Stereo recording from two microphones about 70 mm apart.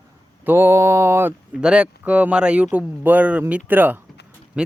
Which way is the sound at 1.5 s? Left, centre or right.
Centre.